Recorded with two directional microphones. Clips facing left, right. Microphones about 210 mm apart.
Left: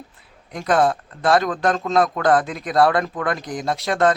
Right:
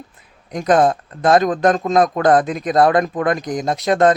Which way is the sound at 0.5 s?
20° right (ahead or behind).